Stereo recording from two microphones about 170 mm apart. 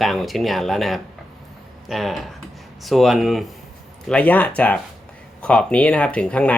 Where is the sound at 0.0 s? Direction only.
Centre (ahead or behind).